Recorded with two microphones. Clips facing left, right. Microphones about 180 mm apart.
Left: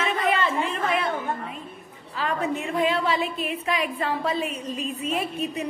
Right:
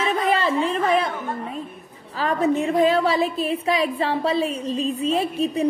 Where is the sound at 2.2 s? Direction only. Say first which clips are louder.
Right 6 dB; 40° right (ahead or behind).